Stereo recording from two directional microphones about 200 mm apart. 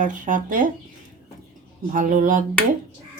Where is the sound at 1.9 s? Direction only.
40° right (ahead or behind).